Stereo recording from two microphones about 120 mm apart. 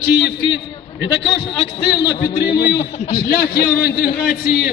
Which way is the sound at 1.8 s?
40° left (ahead or behind).